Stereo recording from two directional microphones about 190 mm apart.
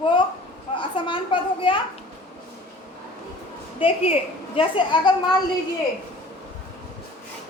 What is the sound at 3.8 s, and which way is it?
Speech, 30° left (ahead or behind).